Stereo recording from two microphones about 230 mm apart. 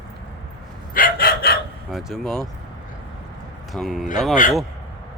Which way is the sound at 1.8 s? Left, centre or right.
Centre.